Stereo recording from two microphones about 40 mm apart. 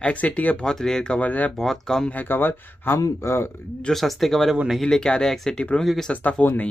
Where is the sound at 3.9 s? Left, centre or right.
Centre; by 5.9 s left.